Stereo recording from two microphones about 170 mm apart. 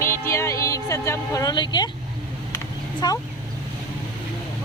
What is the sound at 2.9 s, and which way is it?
Speech, 25° left (ahead or behind).